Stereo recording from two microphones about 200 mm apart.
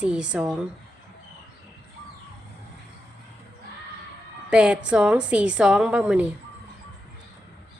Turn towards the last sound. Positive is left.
turn(degrees=-5)  # may be behind; listen again after turning